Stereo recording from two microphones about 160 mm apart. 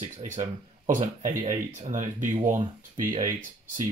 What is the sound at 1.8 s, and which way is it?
Speech, 50° right (ahead or behind).